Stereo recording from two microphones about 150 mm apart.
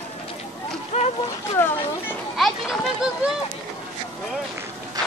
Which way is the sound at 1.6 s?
15° left (ahead or behind).